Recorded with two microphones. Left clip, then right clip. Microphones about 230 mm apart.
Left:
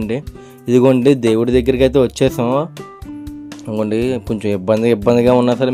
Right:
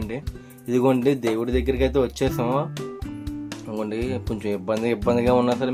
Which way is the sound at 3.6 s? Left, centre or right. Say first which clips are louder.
Left 10 dB; left.